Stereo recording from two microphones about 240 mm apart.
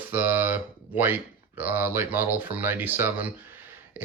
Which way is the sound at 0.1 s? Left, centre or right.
Centre.